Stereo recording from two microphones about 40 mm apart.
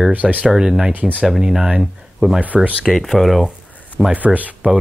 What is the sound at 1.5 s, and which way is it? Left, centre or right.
Speech, centre.